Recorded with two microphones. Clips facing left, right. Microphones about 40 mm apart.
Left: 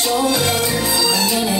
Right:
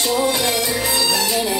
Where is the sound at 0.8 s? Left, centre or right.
Right.